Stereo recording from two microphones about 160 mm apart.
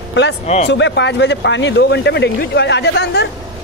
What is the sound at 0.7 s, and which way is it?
Speech, 90° left.